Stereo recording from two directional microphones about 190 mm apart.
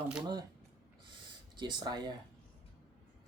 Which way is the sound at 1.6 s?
25° right (ahead or behind).